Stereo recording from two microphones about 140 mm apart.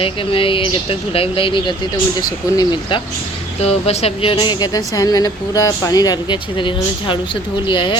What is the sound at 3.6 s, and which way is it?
Speech, 45° left (ahead or behind).